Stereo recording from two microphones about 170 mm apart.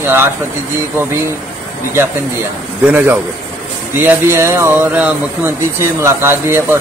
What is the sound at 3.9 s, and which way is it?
Speech, 10° right (ahead or behind).